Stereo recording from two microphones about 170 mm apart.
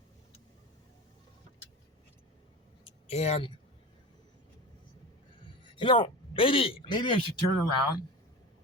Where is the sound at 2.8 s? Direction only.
40° left (ahead or behind).